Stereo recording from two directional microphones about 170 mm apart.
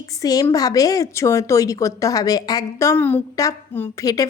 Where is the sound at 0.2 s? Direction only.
20° left (ahead or behind).